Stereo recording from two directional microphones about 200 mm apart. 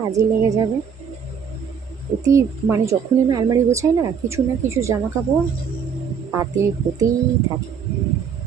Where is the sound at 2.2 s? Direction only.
15° right (ahead or behind).